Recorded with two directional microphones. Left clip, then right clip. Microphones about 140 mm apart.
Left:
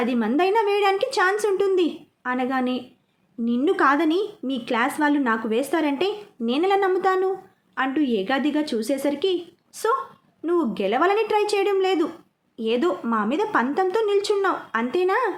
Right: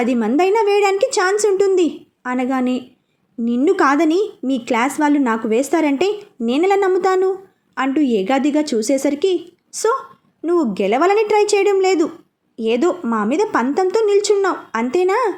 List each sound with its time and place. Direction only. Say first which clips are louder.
0.0 s a woman's voice: right 5 dB; 40° right (ahead or behind)